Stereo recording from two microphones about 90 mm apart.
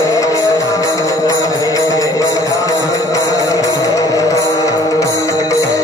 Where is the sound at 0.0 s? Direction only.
35° left (ahead or behind).